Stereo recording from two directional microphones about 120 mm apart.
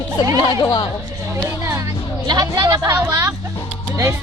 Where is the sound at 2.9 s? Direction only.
15° right (ahead or behind).